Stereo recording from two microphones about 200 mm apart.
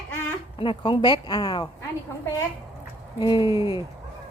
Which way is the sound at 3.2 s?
20° left (ahead or behind).